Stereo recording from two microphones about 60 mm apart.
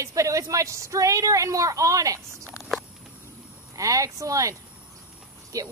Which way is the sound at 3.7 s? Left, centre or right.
Right.